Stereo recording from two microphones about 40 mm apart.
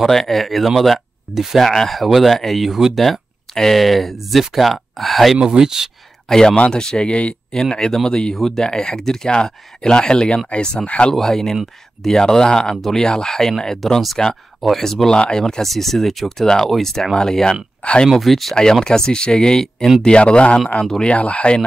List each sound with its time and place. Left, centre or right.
0.1 s speech: centre
1.6 s speech: centre
5.4 s speech: centre
6.2 s speech: centre
7.1 s speech: left
7.5 s speech: centre
8.4 s speech: centre
10.9 s speech: left
11.1 s speech: centre
15.4 s speech: centre
18.6 s speech: centre
20.0 s speech: left